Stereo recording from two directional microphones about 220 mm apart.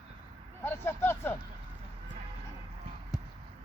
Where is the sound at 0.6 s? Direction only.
10° left (ahead or behind).